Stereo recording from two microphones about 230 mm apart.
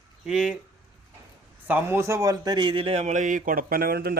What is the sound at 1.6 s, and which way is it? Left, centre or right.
A man's voice, centre.